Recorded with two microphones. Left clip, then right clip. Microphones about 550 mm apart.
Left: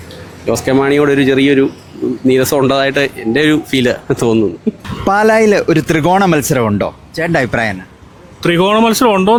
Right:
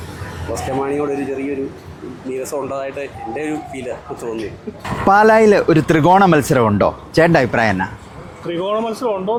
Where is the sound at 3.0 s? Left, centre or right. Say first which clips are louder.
Left 11 dB; left.